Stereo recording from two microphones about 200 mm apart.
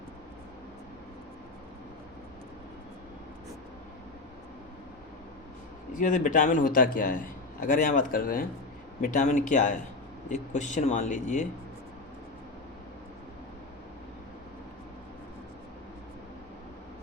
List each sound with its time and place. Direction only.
6.0 s speech: 40° left (ahead or behind)